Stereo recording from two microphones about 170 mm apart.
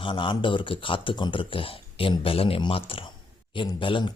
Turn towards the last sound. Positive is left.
turn(degrees=30)  # may be behind; listen again after turning